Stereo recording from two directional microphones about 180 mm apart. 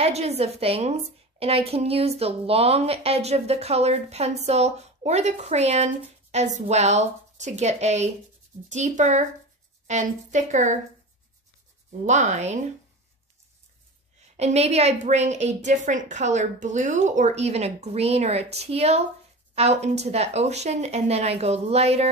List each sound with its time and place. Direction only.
0.0 s a woman's voice: 35° right (ahead or behind)
12.1 s a woman's voice: 40° right (ahead or behind)
14.3 s a woman's voice: 35° right (ahead or behind)